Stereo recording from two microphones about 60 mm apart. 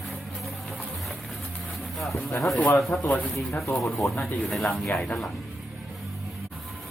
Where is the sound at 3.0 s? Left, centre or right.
Left.